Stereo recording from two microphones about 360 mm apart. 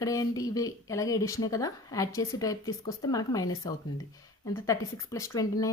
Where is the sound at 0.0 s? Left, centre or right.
Centre.